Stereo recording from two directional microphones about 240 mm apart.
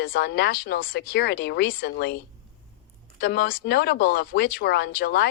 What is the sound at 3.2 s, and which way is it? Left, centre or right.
Speech, left.